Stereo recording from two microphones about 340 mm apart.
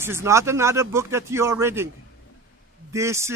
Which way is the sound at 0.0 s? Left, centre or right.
Centre.